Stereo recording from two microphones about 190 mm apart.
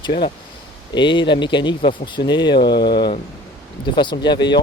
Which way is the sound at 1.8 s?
45° left (ahead or behind).